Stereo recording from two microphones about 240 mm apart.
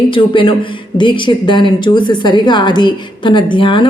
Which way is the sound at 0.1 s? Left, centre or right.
Left.